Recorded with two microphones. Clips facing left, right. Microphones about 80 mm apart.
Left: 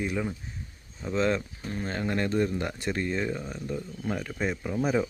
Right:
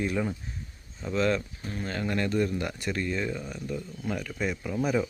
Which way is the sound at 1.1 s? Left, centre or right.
Left.